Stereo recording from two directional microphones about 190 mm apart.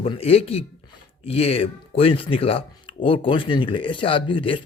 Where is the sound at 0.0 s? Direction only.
30° left (ahead or behind).